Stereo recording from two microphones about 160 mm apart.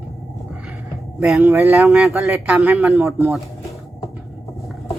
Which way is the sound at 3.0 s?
15° right (ahead or behind).